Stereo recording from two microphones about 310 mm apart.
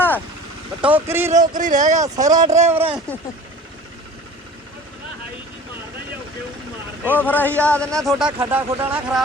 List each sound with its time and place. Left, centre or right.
0.8 s speech: centre
1.3 s speech: right
2.0 s speech: centre
2.7 s speech: centre
7.1 s speech: centre